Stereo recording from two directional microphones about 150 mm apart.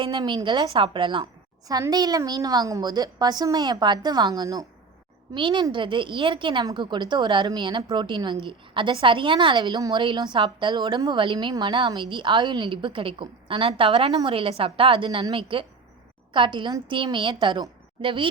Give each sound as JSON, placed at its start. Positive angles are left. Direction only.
{"t": 0.0, "sound": "a woman's voice", "side_deg": -30}